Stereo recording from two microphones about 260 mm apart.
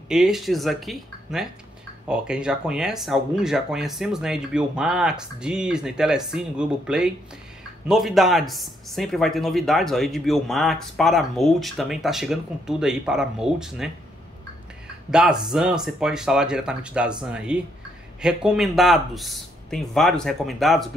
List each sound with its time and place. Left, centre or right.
0.1 s speech: centre
15.0 s speech: centre